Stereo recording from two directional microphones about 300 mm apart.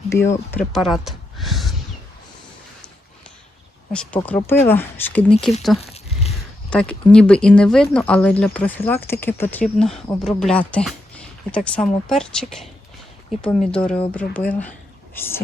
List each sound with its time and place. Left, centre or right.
0.1 s speech: centre
3.9 s speech: centre
5.8 s a sound: left
6.7 s speech: centre